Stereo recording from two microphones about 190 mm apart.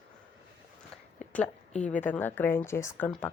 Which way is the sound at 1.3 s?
5° left (ahead or behind).